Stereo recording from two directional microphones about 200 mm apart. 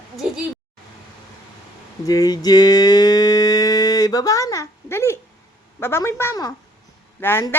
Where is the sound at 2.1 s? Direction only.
20° left (ahead or behind).